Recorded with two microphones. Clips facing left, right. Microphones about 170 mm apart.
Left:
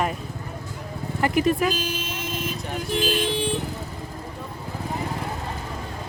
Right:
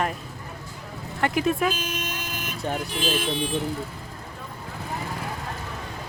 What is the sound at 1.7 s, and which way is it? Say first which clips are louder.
Vehicle: left 2 dB; 35° left (ahead or behind).